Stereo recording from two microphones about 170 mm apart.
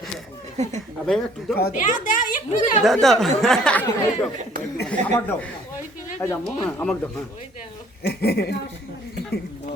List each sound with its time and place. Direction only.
0.5 s speech: 40° right (ahead or behind)
1.0 s speech: 5° left (ahead or behind)
1.5 s a woman's voice: 60° left (ahead or behind)
2.8 s speech: centre (ahead or behind)
4.9 s speech: 10° left (ahead or behind)
8.0 s speech: 70° left (ahead or behind)